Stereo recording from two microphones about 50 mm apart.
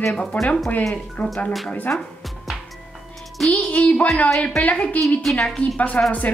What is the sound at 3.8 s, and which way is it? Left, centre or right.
A woman's voice, left.